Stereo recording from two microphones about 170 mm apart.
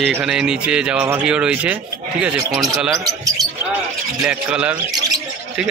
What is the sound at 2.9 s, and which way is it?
Speech, 20° right (ahead or behind).